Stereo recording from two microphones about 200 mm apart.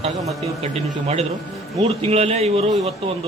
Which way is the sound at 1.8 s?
30° right (ahead or behind).